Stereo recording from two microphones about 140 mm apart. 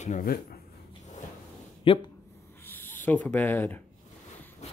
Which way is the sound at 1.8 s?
40° left (ahead or behind).